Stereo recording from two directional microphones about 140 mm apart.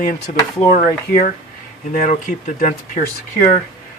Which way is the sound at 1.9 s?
70° left (ahead or behind).